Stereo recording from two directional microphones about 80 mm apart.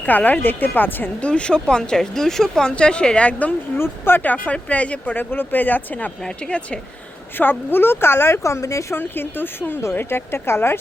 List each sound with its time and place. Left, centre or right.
0.0 s speech: centre
1.3 s speech: centre
3.8 s speech: left; by 6.7 s centre
7.3 s speech: left